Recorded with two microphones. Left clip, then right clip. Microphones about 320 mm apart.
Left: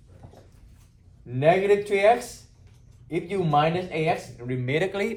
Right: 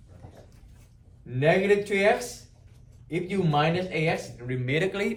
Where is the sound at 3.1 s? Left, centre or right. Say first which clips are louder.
Left 3 dB; centre.